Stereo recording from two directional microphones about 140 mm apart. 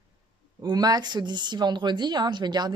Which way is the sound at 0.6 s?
30° right (ahead or behind).